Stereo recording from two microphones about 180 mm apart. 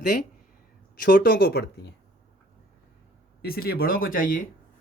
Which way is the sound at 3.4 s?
60° left (ahead or behind).